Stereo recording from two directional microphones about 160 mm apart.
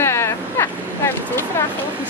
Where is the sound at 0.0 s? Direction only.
15° left (ahead or behind).